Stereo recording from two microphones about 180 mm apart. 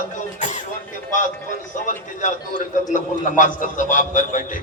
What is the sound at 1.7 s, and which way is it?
A man's voice, 45° left (ahead or behind).